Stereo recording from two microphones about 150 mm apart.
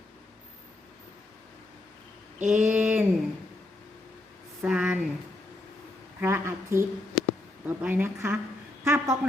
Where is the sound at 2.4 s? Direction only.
55° right (ahead or behind).